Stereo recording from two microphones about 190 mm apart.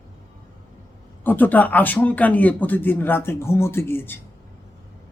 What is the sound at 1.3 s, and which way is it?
Speech, 10° left (ahead or behind).